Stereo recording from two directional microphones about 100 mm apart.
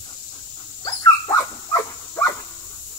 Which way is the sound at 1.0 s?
35° left (ahead or behind).